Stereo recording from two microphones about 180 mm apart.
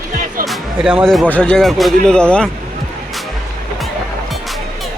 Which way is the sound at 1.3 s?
5° left (ahead or behind).